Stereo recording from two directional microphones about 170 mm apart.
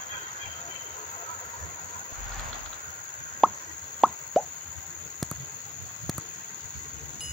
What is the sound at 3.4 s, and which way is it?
Plop, centre (ahead or behind).